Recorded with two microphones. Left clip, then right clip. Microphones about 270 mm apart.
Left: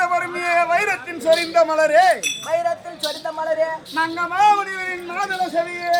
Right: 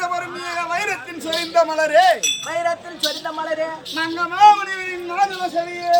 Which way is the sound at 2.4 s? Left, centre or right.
Left.